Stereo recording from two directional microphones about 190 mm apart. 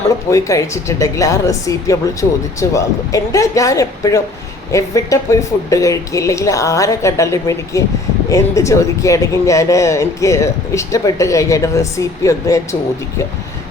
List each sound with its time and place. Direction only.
0.3 s speech: 15° left (ahead or behind)